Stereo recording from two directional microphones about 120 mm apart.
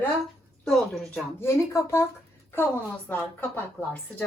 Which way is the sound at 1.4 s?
20° left (ahead or behind).